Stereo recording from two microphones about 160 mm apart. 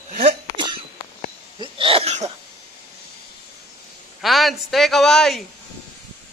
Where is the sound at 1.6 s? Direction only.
35° right (ahead or behind).